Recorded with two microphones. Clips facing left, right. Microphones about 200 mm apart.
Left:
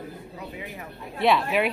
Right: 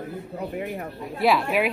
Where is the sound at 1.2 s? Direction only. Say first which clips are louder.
Right 1 dB; centre (ahead or behind).